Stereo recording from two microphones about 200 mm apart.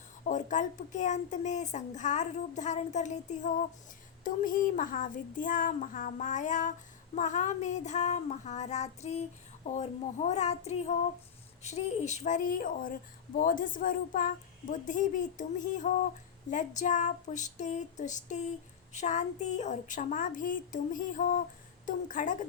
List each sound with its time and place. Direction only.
0.3 s speech: 40° left (ahead or behind)
10.2 s speech: 35° left (ahead or behind)